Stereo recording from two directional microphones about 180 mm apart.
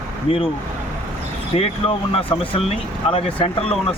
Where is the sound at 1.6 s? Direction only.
30° left (ahead or behind).